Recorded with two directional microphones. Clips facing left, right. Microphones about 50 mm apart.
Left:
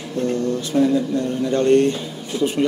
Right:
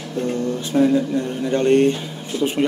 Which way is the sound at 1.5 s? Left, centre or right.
Right.